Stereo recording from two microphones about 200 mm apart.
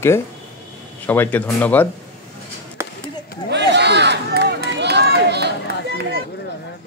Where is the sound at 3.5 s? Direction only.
60° right (ahead or behind).